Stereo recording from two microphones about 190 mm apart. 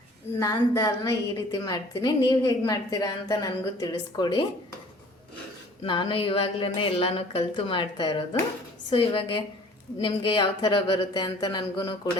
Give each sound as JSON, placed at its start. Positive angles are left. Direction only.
{"t": 0.3, "sound": "a woman's voice", "side_deg": 15}
{"t": 5.8, "sound": "a woman's voice", "side_deg": 25}